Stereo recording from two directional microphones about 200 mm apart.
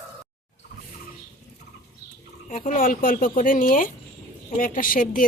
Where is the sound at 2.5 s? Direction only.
40° left (ahead or behind).